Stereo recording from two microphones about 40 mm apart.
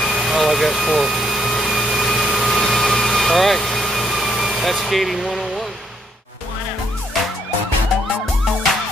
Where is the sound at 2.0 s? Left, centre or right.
Centre.